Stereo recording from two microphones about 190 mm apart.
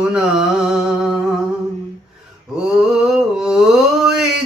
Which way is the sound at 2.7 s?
5° right (ahead or behind).